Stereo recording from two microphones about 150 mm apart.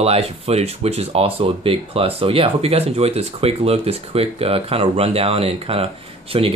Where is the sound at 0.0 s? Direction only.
40° right (ahead or behind).